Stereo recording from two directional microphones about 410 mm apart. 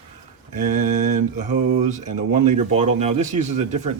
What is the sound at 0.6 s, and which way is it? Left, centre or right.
Speech, centre.